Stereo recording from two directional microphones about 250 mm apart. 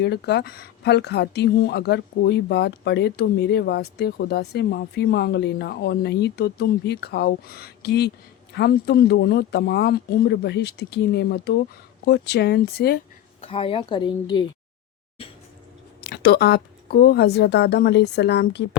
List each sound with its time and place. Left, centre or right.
0.0 s speech: left
13.4 s speech: left
16.0 s speech: left